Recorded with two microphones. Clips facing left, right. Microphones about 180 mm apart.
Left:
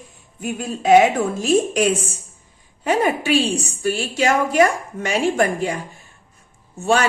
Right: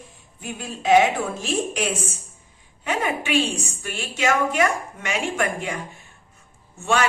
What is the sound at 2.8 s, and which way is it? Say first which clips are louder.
A woman's voice: left 6 dB; 35° left (ahead or behind).